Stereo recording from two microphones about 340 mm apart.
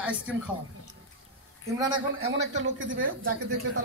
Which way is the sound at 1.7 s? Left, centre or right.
Centre.